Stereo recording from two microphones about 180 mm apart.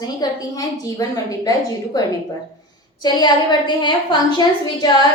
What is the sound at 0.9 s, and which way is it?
A woman's voice, 20° left (ahead or behind).